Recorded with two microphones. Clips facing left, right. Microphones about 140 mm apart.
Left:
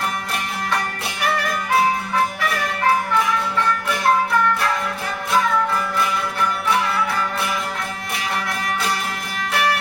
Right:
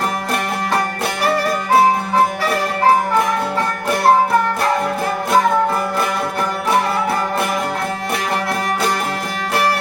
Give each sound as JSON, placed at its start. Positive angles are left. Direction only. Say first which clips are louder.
{"t": 1.2, "sound": "music", "louder": "right 4 dB", "side_deg": -35}